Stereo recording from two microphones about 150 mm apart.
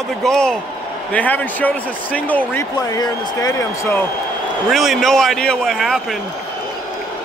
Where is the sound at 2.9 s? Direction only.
25° left (ahead or behind).